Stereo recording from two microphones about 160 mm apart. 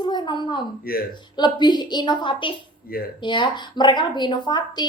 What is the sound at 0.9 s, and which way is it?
Speech, 70° left (ahead or behind).